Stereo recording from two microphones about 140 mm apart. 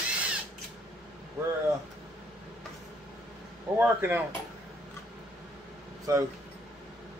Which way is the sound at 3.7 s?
15° right (ahead or behind).